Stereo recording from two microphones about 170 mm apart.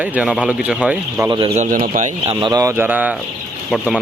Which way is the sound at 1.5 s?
50° right (ahead or behind).